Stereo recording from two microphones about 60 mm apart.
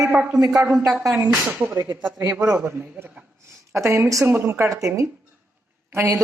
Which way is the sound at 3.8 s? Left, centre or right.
Right.